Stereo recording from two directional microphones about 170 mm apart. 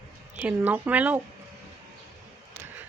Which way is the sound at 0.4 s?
10° right (ahead or behind).